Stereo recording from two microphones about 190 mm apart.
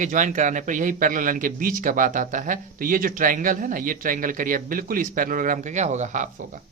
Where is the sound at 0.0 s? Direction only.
40° right (ahead or behind).